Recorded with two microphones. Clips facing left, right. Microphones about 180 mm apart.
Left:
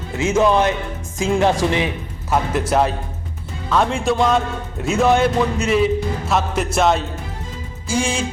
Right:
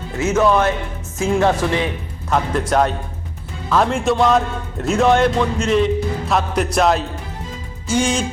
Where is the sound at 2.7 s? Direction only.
5° left (ahead or behind).